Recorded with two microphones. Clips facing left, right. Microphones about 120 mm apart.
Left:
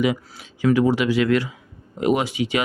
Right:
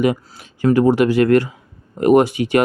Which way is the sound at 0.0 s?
50° right (ahead or behind).